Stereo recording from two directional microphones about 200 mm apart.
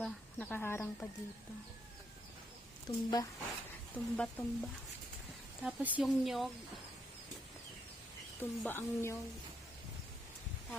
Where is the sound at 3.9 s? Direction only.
5° left (ahead or behind).